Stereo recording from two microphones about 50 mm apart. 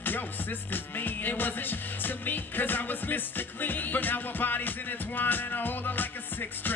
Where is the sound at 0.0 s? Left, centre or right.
Left.